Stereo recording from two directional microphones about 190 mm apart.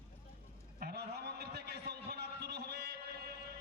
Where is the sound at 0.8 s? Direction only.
60° right (ahead or behind).